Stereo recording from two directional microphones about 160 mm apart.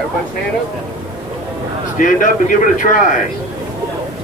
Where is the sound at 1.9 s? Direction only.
55° left (ahead or behind).